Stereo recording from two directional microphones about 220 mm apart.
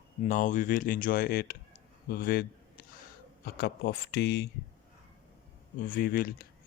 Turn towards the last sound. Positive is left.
turn(degrees=40)  # may be behind; listen again after turning